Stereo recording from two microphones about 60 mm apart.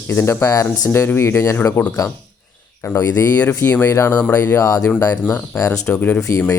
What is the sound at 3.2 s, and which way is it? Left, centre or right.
Speech, left.